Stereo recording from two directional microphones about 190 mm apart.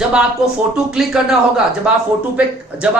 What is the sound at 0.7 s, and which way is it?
Speech, centre (ahead or behind).